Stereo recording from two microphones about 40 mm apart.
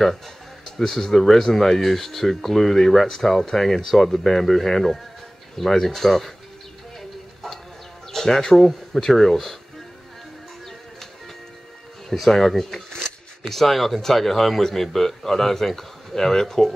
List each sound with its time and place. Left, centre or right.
0.7 s speech: centre
7.4 s a sound: centre
8.1 s speech: centre
12.1 s speech: centre